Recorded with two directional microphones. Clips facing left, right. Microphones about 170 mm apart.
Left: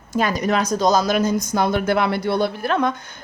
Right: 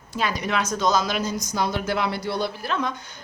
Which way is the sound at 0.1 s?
45° left (ahead or behind).